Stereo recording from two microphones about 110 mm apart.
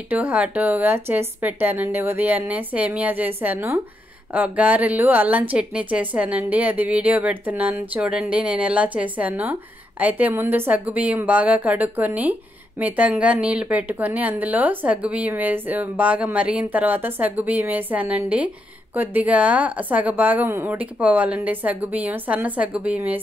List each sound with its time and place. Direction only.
0.1 s a woman's voice: 15° right (ahead or behind)